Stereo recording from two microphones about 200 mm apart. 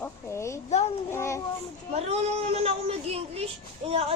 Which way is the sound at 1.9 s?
30° right (ahead or behind).